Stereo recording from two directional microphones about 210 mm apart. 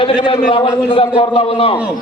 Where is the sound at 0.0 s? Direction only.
25° left (ahead or behind).